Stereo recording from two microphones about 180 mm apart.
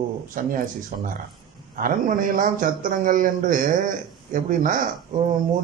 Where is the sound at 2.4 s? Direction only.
50° right (ahead or behind).